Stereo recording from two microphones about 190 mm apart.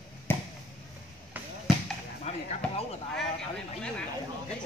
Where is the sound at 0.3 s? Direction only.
10° left (ahead or behind).